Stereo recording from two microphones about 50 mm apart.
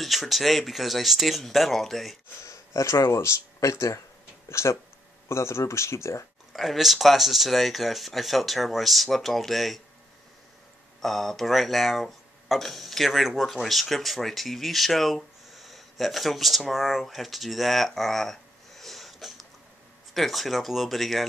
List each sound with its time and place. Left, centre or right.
0.0 s speech: centre
2.4 s speech: left
4.5 s speech: left
6.5 s speech: centre
11.0 s speech: centre